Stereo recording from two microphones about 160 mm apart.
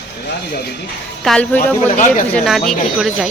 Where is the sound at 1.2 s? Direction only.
5° left (ahead or behind).